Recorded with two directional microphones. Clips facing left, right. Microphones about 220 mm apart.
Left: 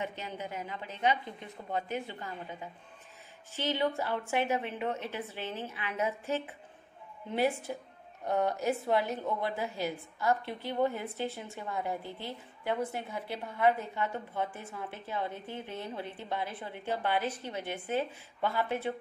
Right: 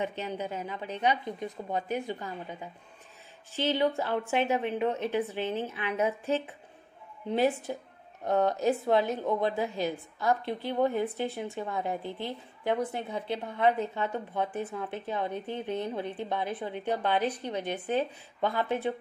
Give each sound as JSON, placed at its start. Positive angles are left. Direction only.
{"t": 0.0, "sound": "a woman's voice", "side_deg": -20}
{"t": 3.5, "sound": "a woman's voice", "side_deg": -15}
{"t": 8.5, "sound": "a woman's voice", "side_deg": -15}